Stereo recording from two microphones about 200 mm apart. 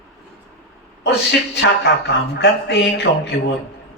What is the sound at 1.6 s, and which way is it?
Speech, 60° left (ahead or behind).